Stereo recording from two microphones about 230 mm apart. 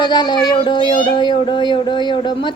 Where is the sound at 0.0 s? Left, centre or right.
Centre.